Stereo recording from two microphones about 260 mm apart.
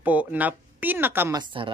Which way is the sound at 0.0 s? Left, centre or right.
Centre.